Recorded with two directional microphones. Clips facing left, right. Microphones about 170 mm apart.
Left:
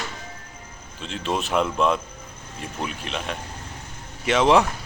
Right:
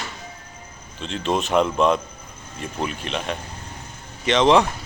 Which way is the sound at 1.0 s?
5° left (ahead or behind).